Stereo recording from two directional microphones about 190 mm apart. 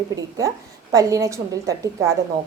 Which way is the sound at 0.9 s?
15° right (ahead or behind).